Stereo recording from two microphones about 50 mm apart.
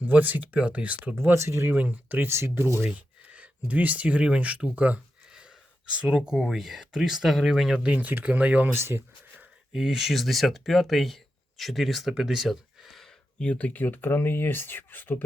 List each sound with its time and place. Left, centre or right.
0.0 s speech: right
1.1 s speech: right
1.7 s speech: right
2.3 s speech: right
2.9 s speech: right
5.3 s a sound: centre
6.2 s speech: centre
7.8 s speech: right
8.7 s speech: right
9.7 s speech: centre
13.4 s speech: left